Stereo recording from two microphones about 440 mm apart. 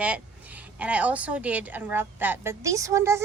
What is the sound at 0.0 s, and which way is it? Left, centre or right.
A woman's voice, centre.